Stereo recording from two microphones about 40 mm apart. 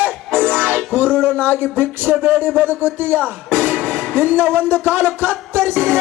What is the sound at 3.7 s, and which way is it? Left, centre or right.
Music, left.